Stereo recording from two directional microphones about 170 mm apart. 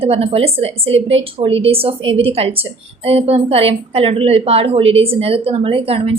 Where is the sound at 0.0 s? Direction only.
35° right (ahead or behind).